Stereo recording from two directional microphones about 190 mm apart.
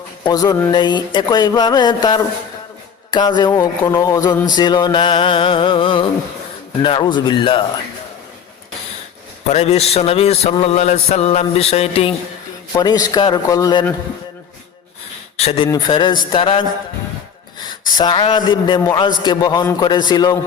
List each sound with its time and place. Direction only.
0.3 s speech: 20° left (ahead or behind)
9.5 s mantra: 35° left (ahead or behind)
12.7 s speech: 20° left (ahead or behind)
15.4 s speech: 30° left (ahead or behind)
17.8 s speech: 20° left (ahead or behind)